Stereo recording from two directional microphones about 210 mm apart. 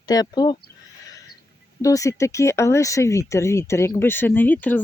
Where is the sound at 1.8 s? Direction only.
15° left (ahead or behind).